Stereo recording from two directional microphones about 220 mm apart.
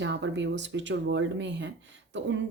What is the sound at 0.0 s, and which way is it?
A woman's voice, 55° right (ahead or behind).